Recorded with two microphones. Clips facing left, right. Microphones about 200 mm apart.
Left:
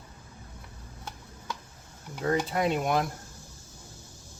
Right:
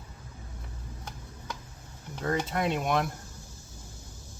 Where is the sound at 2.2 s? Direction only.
5° left (ahead or behind).